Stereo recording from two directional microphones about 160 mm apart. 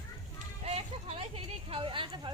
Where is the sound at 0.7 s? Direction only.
40° right (ahead or behind).